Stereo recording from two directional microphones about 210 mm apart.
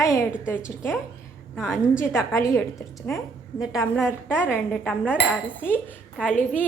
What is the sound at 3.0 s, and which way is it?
A woman's voice, centre (ahead or behind).